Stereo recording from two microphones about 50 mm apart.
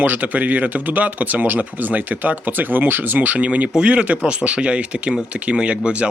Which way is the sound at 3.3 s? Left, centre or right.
Right.